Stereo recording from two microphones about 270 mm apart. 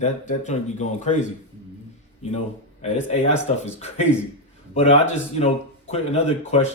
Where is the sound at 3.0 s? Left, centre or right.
Left.